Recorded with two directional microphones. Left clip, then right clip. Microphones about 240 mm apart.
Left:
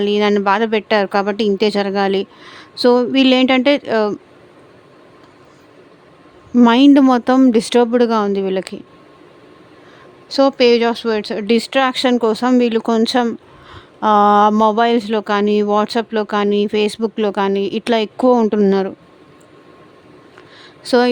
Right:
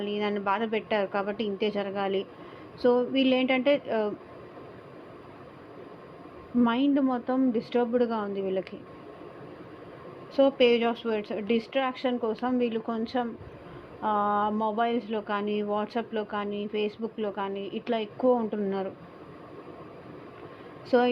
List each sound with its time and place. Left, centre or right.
0.0 s speech: left
6.6 s speech: left
10.3 s speech: left
20.8 s speech: left